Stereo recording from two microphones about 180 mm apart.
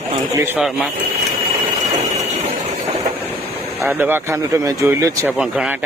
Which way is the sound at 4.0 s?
10° right (ahead or behind).